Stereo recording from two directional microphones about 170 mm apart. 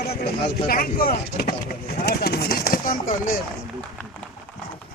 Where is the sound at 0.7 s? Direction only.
60° left (ahead or behind).